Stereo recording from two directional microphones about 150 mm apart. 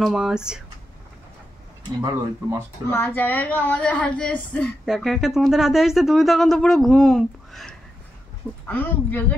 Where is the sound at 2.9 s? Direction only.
15° left (ahead or behind).